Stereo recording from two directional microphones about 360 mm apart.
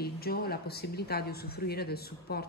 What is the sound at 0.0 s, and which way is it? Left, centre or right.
Speech, left.